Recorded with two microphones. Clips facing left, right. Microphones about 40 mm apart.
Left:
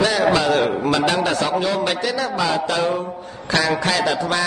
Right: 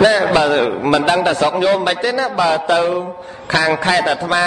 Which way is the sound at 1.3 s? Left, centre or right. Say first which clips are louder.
Right 5 dB; right.